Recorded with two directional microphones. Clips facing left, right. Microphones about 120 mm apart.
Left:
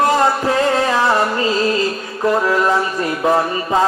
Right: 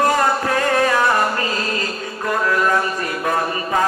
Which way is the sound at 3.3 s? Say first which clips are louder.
Left 5 dB; 25° left (ahead or behind).